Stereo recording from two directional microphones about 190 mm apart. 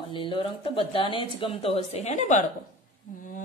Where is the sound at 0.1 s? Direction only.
25° left (ahead or behind).